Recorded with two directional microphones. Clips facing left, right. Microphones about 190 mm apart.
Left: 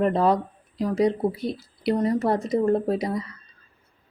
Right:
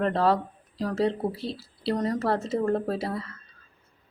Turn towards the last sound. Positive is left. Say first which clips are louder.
# left 4 dB
turn(degrees=15)  # may be behind; listen again after turning